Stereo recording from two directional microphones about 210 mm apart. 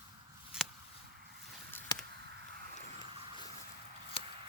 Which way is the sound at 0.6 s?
5° right (ahead or behind).